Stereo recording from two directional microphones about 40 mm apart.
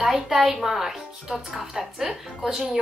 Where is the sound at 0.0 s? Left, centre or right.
Centre.